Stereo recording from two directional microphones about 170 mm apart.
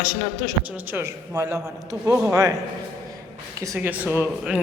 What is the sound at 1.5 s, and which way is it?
Speech, 5° right (ahead or behind).